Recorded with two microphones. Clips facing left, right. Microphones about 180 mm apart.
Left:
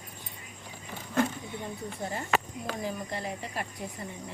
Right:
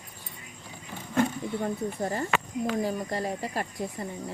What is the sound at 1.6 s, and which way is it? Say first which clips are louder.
Speech: right 7 dB; 45° right (ahead or behind).